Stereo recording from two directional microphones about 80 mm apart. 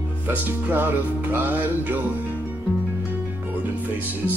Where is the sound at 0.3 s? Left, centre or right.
Right.